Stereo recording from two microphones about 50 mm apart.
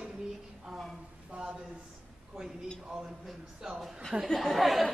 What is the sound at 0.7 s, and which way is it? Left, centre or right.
Speech, centre.